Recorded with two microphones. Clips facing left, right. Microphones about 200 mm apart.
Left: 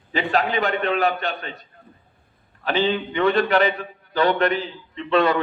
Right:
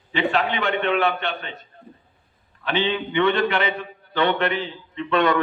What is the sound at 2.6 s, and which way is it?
A man's voice, 40° left (ahead or behind).